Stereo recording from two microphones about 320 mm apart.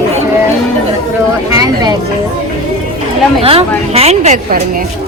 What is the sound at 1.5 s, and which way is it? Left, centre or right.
Speech, centre.